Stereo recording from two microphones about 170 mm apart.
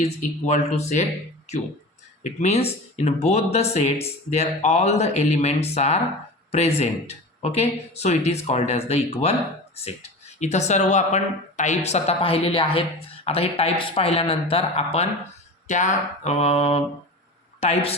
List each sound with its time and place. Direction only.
0.0 s speech: 40° left (ahead or behind)
2.2 s speech: 40° left (ahead or behind)